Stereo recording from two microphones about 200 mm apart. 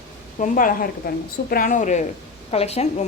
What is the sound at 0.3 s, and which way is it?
A woman's voice, 40° left (ahead or behind).